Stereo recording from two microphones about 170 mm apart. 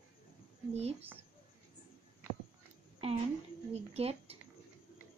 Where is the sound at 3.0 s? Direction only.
35° right (ahead or behind).